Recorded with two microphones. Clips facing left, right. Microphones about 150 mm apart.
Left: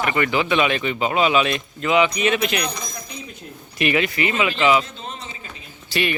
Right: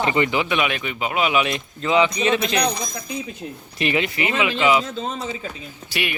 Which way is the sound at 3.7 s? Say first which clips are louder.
Left 2 dB; 25° right (ahead or behind).